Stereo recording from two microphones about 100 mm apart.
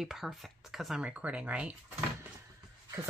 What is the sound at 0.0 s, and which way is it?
Speech, centre (ahead or behind).